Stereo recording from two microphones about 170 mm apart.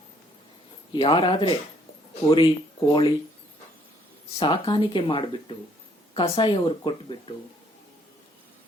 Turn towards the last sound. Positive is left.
turn(degrees=30)  # may be behind; listen again after turning